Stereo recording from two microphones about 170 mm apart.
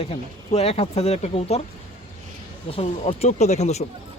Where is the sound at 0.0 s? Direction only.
35° left (ahead or behind).